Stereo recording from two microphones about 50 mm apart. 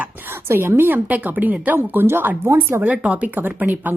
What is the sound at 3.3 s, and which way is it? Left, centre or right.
Speech, right.